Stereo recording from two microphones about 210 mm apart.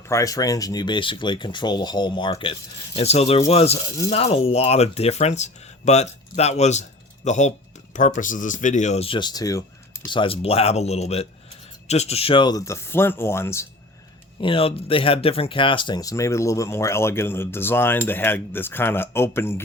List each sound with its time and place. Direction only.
0.1 s speech: 15° left (ahead or behind)
14.4 s speech: 25° left (ahead or behind)